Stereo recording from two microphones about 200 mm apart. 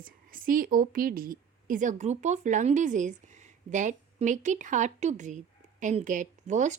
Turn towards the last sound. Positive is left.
turn(degrees=-35)  # may be behind; listen again after turning